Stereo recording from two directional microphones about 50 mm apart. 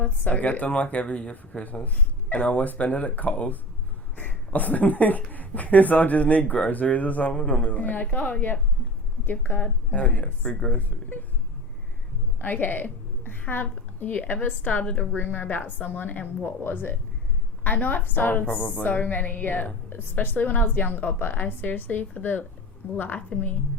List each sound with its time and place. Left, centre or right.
0.0 s a woman's voice: left
12.4 s a woman's voice: left
15.1 s a woman's voice: left